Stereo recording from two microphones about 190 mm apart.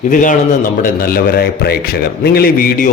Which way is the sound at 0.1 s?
45° left (ahead or behind).